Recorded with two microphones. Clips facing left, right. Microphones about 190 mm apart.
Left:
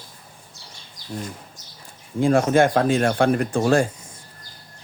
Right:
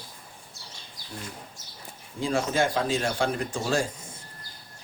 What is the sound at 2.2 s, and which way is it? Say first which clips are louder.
Speech: left 8 dB; 55° left (ahead or behind).